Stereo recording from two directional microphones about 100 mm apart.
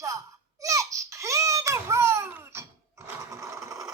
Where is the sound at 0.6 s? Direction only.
30° right (ahead or behind).